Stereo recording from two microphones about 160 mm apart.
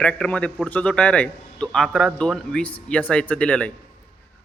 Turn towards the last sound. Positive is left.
turn(degrees=10)  # may be behind; listen again after turning